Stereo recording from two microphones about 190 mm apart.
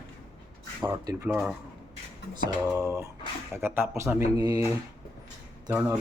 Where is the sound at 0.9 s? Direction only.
20° right (ahead or behind).